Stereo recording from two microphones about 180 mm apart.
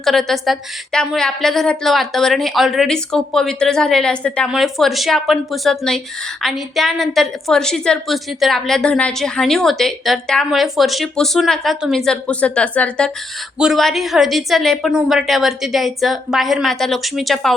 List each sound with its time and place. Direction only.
0.0 s a woman's voice: centre (ahead or behind)